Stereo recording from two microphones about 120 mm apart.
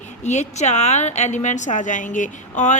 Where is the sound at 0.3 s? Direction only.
75° left (ahead or behind).